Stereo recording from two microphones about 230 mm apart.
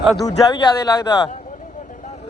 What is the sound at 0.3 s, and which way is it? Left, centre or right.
Speech, centre.